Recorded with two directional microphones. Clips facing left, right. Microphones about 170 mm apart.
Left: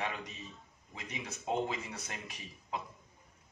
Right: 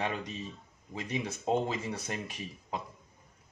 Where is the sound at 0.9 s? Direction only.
30° right (ahead or behind).